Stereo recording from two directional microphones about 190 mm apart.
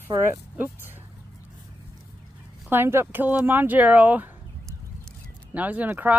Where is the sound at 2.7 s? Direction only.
10° right (ahead or behind).